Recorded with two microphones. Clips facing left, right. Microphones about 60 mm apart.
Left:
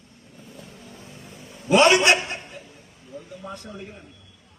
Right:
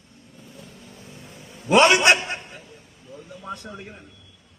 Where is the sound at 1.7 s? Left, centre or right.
Right.